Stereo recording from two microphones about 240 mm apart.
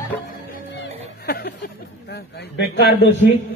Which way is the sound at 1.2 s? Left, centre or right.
Left.